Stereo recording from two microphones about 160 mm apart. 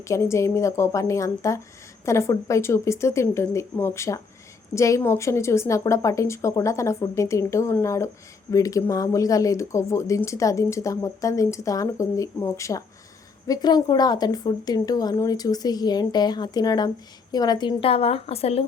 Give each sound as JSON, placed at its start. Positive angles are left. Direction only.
{"t": 0.0, "sound": "a woman's voice", "side_deg": 20}